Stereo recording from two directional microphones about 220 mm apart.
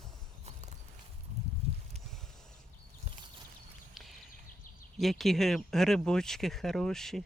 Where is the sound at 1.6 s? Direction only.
25° right (ahead or behind).